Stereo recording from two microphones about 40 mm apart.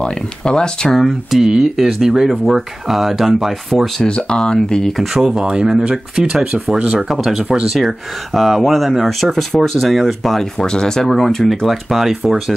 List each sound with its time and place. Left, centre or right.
0.0 s speech: left
0.9 s speech: centre
1.4 s speech: centre
3.7 s speech: centre
4.1 s speech: left
4.9 s speech: centre
5.4 s speech: right
7.1 s speech: centre
10.4 s speech: centre